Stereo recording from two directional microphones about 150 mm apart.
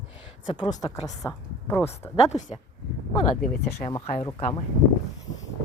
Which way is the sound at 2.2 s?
50° left (ahead or behind).